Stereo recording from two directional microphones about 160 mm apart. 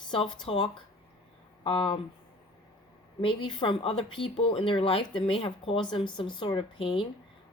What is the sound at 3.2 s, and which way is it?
Speech, 30° left (ahead or behind).